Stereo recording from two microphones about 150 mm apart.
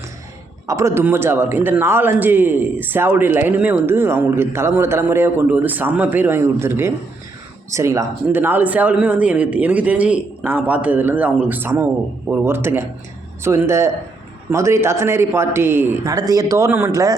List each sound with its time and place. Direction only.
0.7 s a man's voice: 20° right (ahead or behind)